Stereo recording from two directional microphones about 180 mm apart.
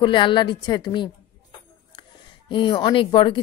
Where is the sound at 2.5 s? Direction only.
25° left (ahead or behind).